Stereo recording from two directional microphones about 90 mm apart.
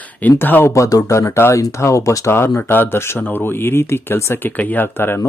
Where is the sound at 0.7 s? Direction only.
40° left (ahead or behind).